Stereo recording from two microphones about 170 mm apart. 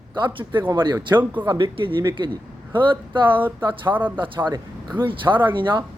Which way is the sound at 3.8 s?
10° right (ahead or behind).